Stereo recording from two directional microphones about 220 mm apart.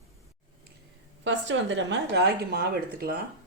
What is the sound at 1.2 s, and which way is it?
Speech, 55° right (ahead or behind).